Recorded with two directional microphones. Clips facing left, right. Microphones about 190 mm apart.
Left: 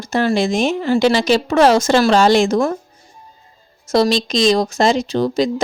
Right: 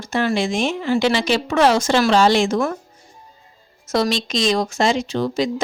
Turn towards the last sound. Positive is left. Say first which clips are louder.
# left 4 dB
turn(degrees=40)  # may be behind; listen again after turning